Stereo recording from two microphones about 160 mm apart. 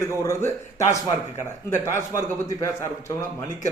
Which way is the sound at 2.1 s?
20° left (ahead or behind).